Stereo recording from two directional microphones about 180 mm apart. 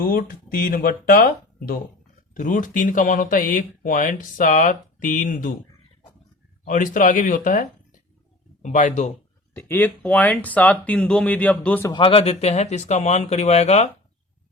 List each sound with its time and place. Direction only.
0.0 s speech: 50° left (ahead or behind)
6.7 s speech: 45° left (ahead or behind)
9.6 s speech: 10° left (ahead or behind)
11.9 s speech: 30° left (ahead or behind)